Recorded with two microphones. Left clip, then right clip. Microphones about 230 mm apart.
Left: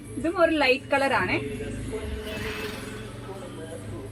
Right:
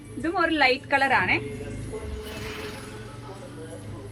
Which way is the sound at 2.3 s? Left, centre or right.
Left.